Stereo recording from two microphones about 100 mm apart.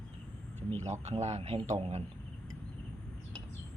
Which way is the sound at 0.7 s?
80° right.